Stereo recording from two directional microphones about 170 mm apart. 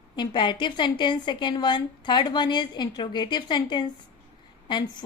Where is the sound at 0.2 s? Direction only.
30° left (ahead or behind).